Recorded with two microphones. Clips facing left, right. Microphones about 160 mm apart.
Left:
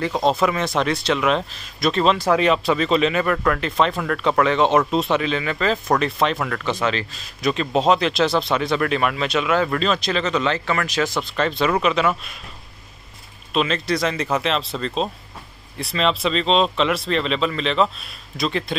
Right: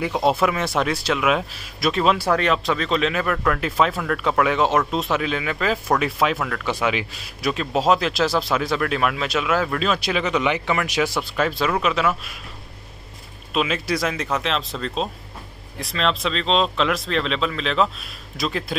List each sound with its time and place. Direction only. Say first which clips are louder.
0.0 s speech: even; 5° right (ahead or behind)
2.2 s speech: left 3 dB; 5° left (ahead or behind)
13.5 s speech: left 2 dB; 5° right (ahead or behind)